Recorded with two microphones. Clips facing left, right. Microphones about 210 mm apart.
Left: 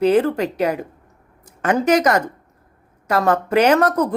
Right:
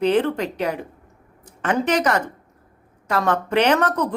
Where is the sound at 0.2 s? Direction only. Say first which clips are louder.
Left 3 dB; 40° left (ahead or behind).